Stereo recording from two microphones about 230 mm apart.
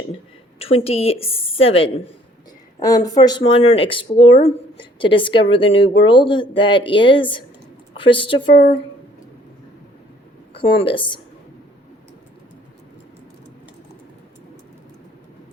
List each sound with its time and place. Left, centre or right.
0.6 s speech: left
10.6 s speech: left